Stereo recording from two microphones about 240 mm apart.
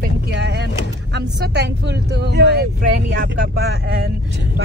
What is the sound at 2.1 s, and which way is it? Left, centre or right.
Speech, right.